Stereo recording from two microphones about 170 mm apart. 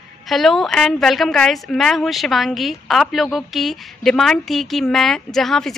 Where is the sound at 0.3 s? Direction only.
Centre (ahead or behind).